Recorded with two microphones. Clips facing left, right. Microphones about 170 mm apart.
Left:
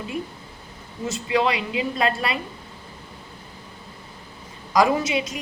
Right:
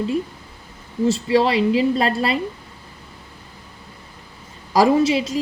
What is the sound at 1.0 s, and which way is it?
A woman's voice, 30° right (ahead or behind).